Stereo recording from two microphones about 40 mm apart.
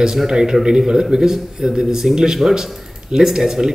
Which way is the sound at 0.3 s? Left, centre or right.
Centre.